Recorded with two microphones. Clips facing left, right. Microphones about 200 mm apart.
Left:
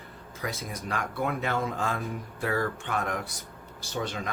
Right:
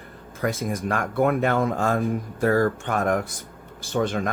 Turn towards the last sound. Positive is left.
turn(degrees=-50)  # may be behind; listen again after turning